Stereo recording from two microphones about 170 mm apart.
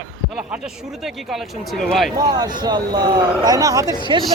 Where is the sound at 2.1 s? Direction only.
25° right (ahead or behind).